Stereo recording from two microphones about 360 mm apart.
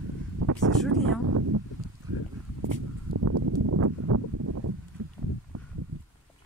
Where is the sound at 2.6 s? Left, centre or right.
Right.